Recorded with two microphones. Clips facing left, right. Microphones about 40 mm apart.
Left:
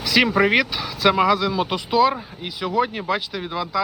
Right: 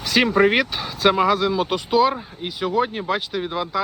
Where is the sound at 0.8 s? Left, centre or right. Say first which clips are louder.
Even; right.